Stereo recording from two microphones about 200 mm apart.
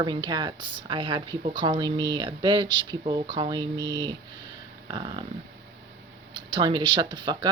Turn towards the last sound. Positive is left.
turn(degrees=-20)  # may be behind; listen again after turning